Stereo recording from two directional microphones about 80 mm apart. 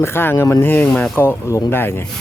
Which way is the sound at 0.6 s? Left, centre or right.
Left.